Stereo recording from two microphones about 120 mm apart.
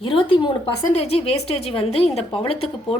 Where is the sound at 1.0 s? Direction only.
55° left (ahead or behind).